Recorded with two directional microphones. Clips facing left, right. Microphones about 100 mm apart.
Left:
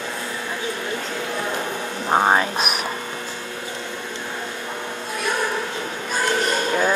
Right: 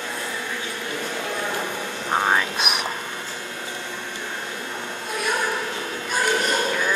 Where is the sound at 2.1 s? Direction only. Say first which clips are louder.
Left 4 dB; 30° left (ahead or behind).